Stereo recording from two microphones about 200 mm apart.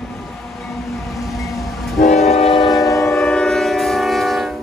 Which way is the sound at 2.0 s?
35° left (ahead or behind).